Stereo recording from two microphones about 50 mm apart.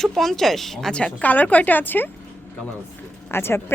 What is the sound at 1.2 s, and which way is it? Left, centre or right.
Speech, left.